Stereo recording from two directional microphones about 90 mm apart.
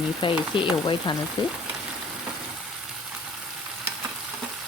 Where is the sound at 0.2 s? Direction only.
70° left (ahead or behind).